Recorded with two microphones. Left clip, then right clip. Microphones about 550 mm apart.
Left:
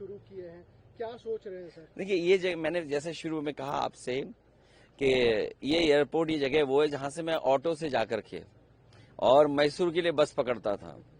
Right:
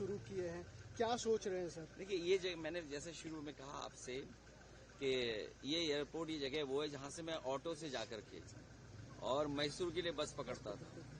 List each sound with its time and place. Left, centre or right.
0.9 s speech: right
2.0 s speech: left